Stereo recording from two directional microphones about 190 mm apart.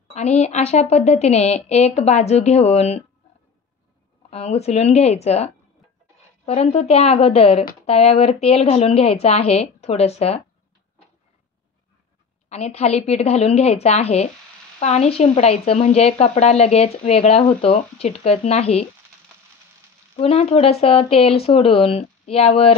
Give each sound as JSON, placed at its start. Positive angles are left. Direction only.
{"t": 0.1, "sound": "speech", "side_deg": 35}
{"t": 4.3, "sound": "speech", "side_deg": 35}
{"t": 12.4, "sound": "speech", "side_deg": 35}
{"t": 20.2, "sound": "speech", "side_deg": 30}